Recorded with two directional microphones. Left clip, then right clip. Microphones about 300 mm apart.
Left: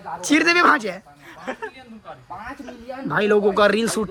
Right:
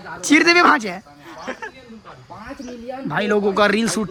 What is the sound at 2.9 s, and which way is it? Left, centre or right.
Speech, centre.